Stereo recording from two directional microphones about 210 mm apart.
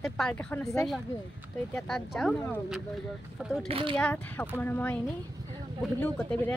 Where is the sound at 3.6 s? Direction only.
25° right (ahead or behind).